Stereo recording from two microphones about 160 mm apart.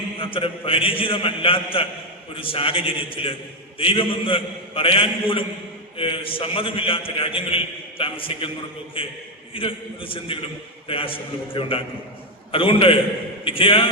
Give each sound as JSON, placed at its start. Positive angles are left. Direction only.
{"t": 0.2, "sound": "a man's voice", "side_deg": 35}